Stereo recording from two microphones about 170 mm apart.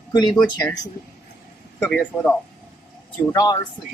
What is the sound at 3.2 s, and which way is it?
Speech, 20° left (ahead or behind).